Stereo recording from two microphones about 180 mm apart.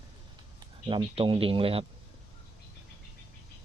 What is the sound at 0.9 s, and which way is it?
Speech, 25° right (ahead or behind).